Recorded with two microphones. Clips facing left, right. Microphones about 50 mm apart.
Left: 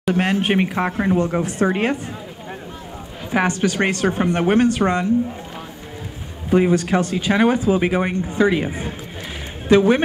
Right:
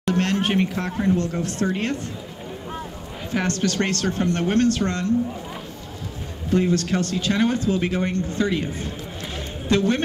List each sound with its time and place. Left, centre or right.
0.0 s speech: centre
3.3 s speech: centre
6.5 s speech: centre